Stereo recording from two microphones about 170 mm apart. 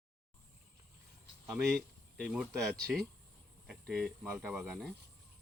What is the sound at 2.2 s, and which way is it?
Speech, centre (ahead or behind).